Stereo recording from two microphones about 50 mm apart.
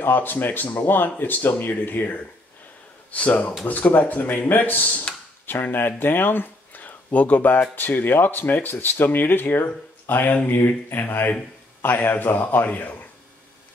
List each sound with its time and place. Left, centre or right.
0.0 s speech: left
3.1 s speech: left
5.5 s speech: left